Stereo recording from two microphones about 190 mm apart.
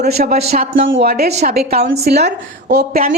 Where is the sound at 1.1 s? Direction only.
55° right (ahead or behind).